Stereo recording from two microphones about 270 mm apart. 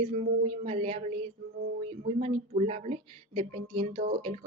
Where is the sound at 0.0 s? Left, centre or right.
Right.